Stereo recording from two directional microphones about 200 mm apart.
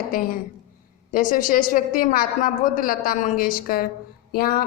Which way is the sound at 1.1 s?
40° left (ahead or behind).